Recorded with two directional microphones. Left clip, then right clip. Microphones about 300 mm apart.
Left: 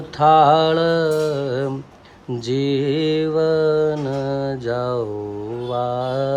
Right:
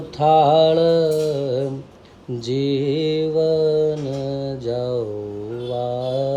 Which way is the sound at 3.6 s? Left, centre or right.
Centre.